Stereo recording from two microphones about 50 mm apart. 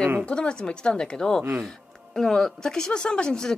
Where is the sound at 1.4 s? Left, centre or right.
Right.